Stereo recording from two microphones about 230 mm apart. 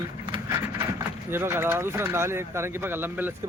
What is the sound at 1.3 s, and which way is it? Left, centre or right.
Speech, centre.